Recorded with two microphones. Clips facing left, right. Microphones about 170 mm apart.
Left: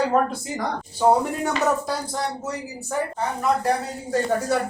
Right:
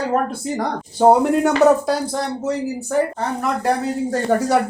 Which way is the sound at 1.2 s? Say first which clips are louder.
Right 9 dB; 75° right (ahead or behind).